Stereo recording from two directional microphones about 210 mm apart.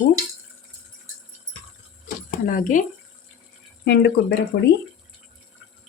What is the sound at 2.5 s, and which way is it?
Speech, 40° left (ahead or behind).